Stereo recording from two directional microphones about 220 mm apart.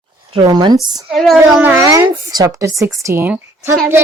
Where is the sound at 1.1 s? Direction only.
Centre (ahead or behind).